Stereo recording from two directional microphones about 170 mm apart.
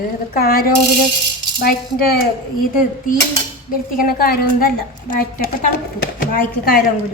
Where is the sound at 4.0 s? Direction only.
60° left (ahead or behind).